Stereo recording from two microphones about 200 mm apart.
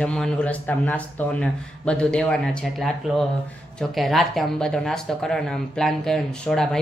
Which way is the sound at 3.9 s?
Centre (ahead or behind).